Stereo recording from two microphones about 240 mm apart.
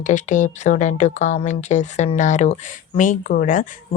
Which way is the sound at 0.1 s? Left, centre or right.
Left.